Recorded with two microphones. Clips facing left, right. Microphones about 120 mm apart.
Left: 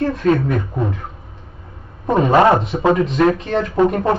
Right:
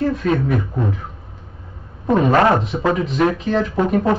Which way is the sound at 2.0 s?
Centre (ahead or behind).